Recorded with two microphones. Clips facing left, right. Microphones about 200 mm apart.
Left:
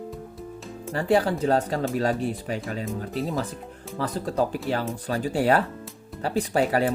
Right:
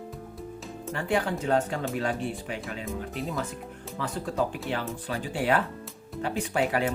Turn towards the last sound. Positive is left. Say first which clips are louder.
# left 4 dB
turn(degrees=35)  # may be behind; listen again after turning